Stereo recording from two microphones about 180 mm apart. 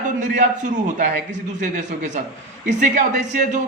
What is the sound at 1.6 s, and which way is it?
A man's voice, 45° right (ahead or behind).